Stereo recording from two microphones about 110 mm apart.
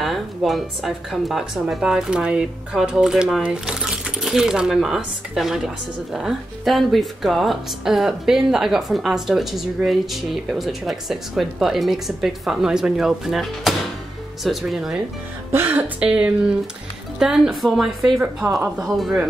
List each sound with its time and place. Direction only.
0.0 s speech: centre (ahead or behind)
15.5 s speech: 20° right (ahead or behind)
16.0 s speech: 10° right (ahead or behind)